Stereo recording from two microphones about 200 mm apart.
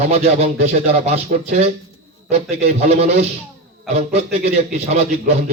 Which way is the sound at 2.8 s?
35° right (ahead or behind).